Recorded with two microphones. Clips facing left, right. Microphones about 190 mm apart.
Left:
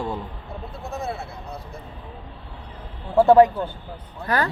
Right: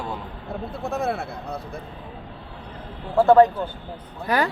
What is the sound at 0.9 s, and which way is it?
Speech, 55° right (ahead or behind).